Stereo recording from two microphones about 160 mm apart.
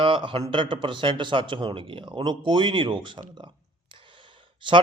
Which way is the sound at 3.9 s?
30° right (ahead or behind).